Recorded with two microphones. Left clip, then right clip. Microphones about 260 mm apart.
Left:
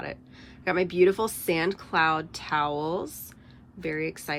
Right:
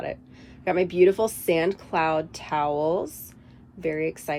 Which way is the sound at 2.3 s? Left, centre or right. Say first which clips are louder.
Right 2 dB; left.